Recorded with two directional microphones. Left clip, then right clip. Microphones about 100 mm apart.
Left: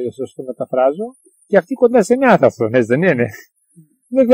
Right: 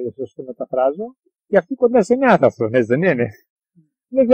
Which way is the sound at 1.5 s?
10° left (ahead or behind).